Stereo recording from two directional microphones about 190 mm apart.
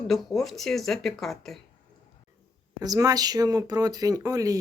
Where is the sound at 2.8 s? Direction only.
20° right (ahead or behind).